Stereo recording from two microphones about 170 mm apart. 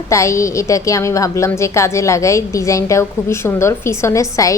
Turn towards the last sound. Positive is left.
turn(degrees=20)  # may be behind; listen again after turning